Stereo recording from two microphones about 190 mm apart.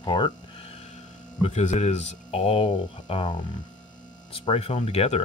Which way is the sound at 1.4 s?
40° left (ahead or behind).